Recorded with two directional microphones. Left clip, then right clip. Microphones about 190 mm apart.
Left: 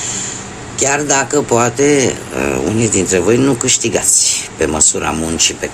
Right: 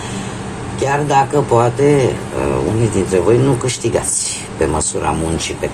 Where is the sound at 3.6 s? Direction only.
35° left (ahead or behind).